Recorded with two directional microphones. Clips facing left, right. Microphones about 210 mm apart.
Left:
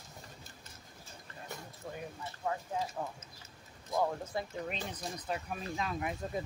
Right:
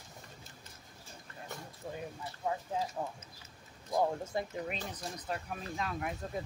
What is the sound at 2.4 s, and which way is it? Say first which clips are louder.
Speech: right 1 dB; 15° right (ahead or behind).